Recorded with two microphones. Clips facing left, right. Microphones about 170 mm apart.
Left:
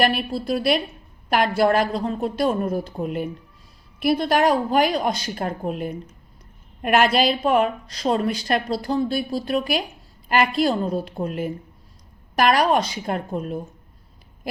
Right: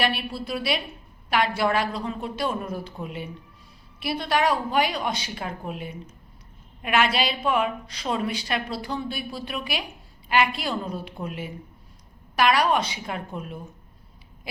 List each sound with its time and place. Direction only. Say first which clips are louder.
0.0 s a woman's voice: left 5 dB; 45° left (ahead or behind)